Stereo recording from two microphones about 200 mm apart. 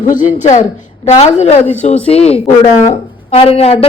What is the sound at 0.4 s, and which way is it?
A woman's voice, 35° left (ahead or behind).